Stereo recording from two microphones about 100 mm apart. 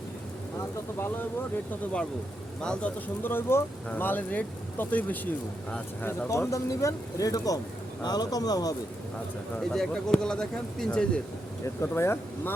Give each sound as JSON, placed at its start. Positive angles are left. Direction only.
{"t": 0.9, "sound": "speech", "side_deg": 20}
{"t": 2.6, "sound": "speech", "side_deg": 10}
{"t": 3.2, "sound": "speech", "side_deg": 20}
{"t": 6.2, "sound": "speech", "side_deg": 30}
{"t": 9.6, "sound": "speech", "side_deg": 5}
{"t": 11.6, "sound": "speech", "side_deg": 25}